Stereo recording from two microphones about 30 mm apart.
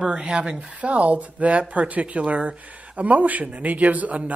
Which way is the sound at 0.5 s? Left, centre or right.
Right.